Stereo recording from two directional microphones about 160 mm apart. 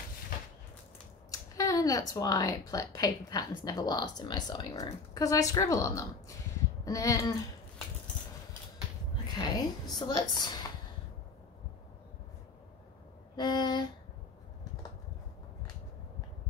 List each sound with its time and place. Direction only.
1.3 s speech: 20° left (ahead or behind)
6.8 s a sound: 20° left (ahead or behind)
9.4 s a woman's voice: 25° left (ahead or behind)
13.4 s speech: 25° left (ahead or behind)